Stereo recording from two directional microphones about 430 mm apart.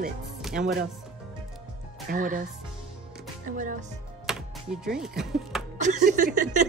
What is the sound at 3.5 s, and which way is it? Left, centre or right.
Speech, centre.